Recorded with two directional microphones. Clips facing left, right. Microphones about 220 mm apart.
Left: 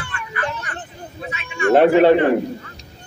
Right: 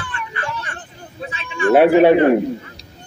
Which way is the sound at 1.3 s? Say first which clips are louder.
Left 1 dB; 30° right (ahead or behind).